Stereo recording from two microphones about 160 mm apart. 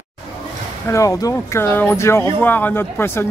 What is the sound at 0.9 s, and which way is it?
A man's voice, 20° left (ahead or behind).